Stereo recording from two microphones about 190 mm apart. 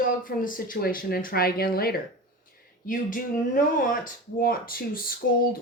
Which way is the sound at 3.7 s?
45° left (ahead or behind).